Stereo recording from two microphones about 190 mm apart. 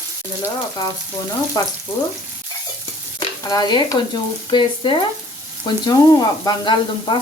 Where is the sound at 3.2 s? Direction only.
20° left (ahead or behind).